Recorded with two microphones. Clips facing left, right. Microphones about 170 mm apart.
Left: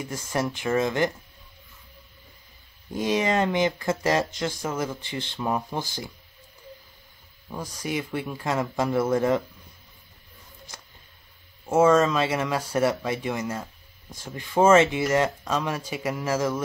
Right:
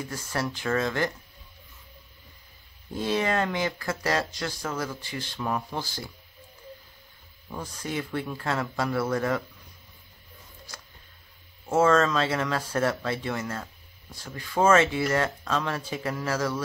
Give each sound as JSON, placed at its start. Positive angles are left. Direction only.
{"t": 0.0, "sound": "speech", "side_deg": 20}
{"t": 2.9, "sound": "speech", "side_deg": 15}
{"t": 7.4, "sound": "speech", "side_deg": 10}
{"t": 11.6, "sound": "speech", "side_deg": 15}